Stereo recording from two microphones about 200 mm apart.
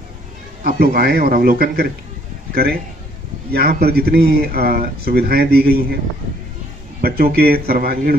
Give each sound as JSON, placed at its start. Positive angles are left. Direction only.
{"t": 0.7, "sound": "speech", "side_deg": -50}
{"t": 7.0, "sound": "speech", "side_deg": -50}